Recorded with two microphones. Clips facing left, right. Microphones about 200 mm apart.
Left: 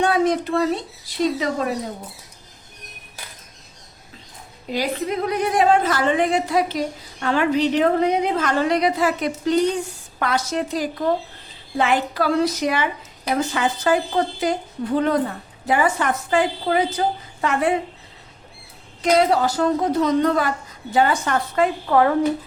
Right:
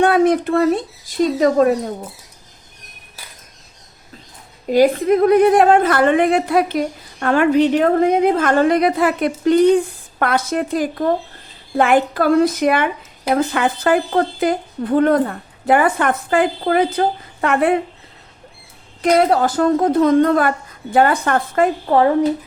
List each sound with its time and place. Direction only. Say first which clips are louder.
0.0 s speech: right 5 dB; 55° right (ahead or behind)
4.7 s a woman's voice: right 10 dB; 50° right (ahead or behind)
19.0 s a woman's voice: right 3 dB; 55° right (ahead or behind)
21.8 s speech: right 3 dB; 30° right (ahead or behind)